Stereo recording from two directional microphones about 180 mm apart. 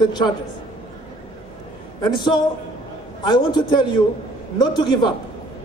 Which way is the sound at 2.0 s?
25° left (ahead or behind).